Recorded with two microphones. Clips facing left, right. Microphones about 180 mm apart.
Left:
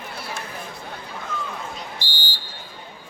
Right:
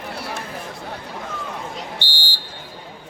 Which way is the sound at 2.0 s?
75° right (ahead or behind).